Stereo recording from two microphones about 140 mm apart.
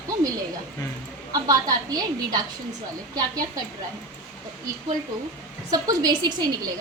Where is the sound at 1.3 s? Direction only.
25° right (ahead or behind).